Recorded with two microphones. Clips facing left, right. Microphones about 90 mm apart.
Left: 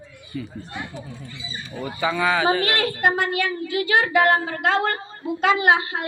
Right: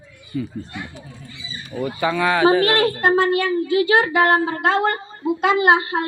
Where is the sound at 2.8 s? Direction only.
40° right (ahead or behind).